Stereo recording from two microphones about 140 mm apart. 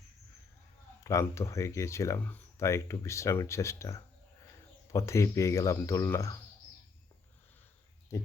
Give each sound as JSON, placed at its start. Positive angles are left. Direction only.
{"t": 1.0, "sound": "speech", "side_deg": 20}
{"t": 8.1, "sound": "speech", "side_deg": 20}